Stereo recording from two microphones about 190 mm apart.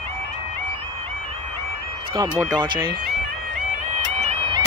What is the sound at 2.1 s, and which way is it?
Speech, 20° right (ahead or behind).